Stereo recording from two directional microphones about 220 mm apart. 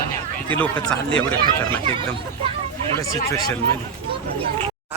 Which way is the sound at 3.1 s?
15° left (ahead or behind).